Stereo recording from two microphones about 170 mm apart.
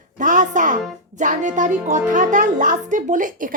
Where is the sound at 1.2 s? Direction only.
50° right (ahead or behind).